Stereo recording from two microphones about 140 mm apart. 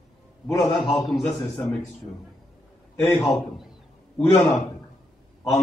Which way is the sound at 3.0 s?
20° left (ahead or behind).